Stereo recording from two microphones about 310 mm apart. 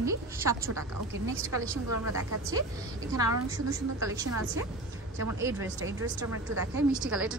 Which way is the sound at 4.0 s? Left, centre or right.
Centre.